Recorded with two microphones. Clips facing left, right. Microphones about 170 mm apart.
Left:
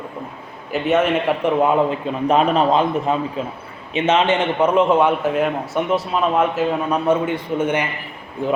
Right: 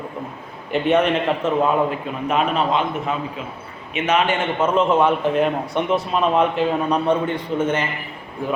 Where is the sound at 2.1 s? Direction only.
35° left (ahead or behind); by 7.9 s 10° left (ahead or behind).